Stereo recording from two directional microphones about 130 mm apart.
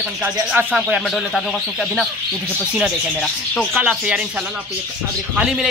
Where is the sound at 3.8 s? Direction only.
10° right (ahead or behind).